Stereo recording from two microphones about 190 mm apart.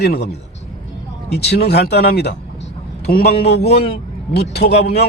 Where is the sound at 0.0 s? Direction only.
60° left (ahead or behind).